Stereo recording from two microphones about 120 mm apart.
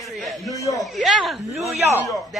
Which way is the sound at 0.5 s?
30° left (ahead or behind).